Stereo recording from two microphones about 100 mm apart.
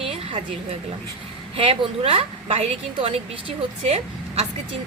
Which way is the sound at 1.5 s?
65° right (ahead or behind).